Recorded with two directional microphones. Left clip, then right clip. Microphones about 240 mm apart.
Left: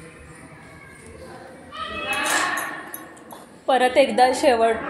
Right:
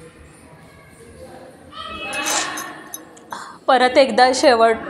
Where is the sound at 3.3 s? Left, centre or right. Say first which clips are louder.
Right 5 dB; centre.